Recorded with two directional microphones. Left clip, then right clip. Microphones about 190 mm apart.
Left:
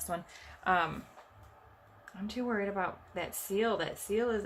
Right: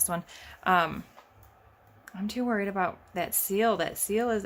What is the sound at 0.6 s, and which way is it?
Speech, 60° right (ahead or behind).